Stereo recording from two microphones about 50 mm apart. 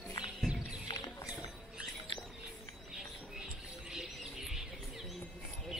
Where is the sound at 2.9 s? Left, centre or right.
Centre.